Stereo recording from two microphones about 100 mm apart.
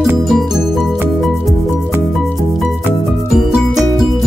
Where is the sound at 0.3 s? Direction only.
Centre (ahead or behind).